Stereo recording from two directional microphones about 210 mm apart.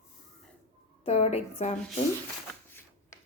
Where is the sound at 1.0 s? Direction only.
30° left (ahead or behind).